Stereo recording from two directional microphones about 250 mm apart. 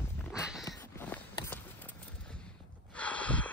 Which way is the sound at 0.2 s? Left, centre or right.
Centre.